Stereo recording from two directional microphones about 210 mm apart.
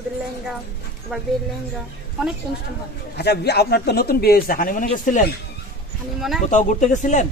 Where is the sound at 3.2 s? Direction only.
50° left (ahead or behind).